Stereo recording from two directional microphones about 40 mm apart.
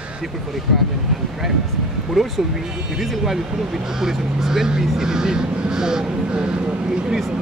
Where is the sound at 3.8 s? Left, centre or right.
Centre.